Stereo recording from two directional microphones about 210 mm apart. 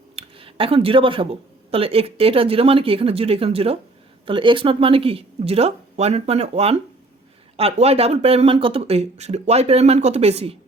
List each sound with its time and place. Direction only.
0.2 s speech: 25° right (ahead or behind)